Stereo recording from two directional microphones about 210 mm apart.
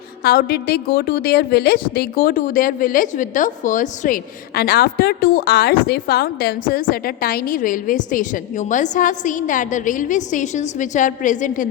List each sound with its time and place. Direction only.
0.2 s a woman's voice: 45° left (ahead or behind)